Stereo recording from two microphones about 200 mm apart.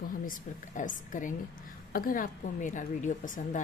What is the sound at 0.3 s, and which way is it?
A woman's voice, 40° left (ahead or behind).